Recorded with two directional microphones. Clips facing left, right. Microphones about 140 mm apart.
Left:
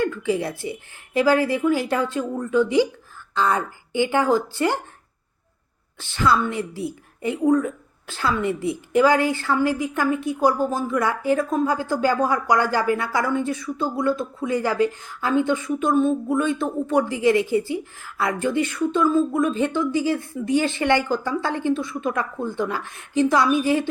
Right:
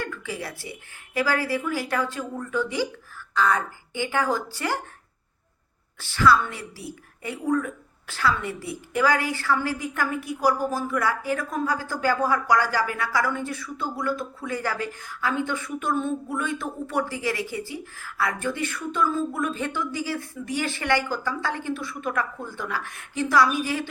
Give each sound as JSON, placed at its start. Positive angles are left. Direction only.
{"t": 0.0, "sound": "a woman's voice", "side_deg": 20}
{"t": 6.0, "sound": "a woman's voice", "side_deg": 20}